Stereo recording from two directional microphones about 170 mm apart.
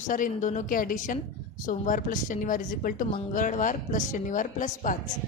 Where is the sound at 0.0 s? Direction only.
50° left (ahead or behind).